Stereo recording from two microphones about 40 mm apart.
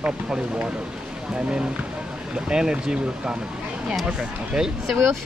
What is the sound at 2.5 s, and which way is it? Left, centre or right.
Speech, right.